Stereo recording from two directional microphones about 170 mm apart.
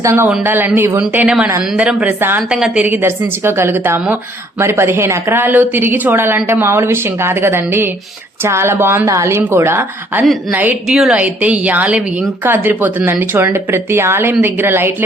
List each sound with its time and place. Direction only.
0.0 s a woman's voice: 15° right (ahead or behind)